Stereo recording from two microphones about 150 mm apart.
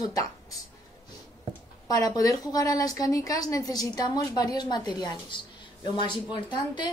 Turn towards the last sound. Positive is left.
turn(degrees=30)  # may be behind; listen again after turning